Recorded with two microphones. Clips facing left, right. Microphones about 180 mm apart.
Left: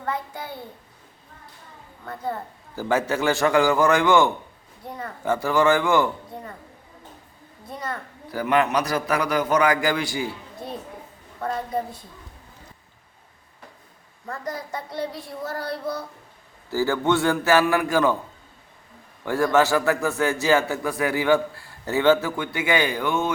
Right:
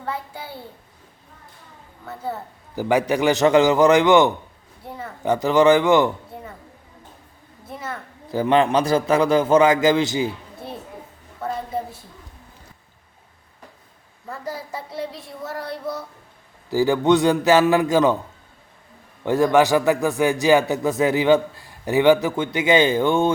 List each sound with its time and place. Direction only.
0.0 s a child's voice: 10° right (ahead or behind)
2.0 s a man's voice: 5° right (ahead or behind)
4.9 s child singing: 5° right (ahead or behind)
5.2 s a man's voice: 20° right (ahead or behind)
7.7 s child singing: 5° right (ahead or behind)
8.3 s a man's voice: 25° right (ahead or behind)
11.3 s a woman's voice: 5° right (ahead or behind)
14.3 s child singing: 5° right (ahead or behind)
16.6 s a man's voice: 15° right (ahead or behind)
19.2 s a man's voice: 20° right (ahead or behind)